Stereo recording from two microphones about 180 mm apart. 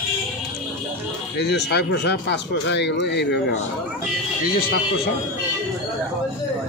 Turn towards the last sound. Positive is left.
turn(degrees=55)  # may be behind; listen again after turning